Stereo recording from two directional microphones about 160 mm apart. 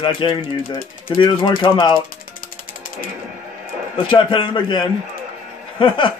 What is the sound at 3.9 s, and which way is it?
Speech, 30° left (ahead or behind).